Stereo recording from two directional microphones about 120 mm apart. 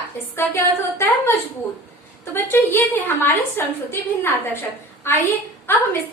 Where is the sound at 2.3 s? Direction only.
20° left (ahead or behind).